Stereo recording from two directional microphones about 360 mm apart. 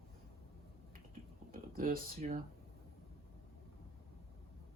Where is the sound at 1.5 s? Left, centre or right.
Right.